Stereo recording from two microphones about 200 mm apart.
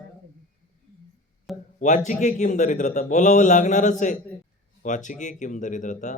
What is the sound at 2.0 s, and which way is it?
Speech, 35° left (ahead or behind).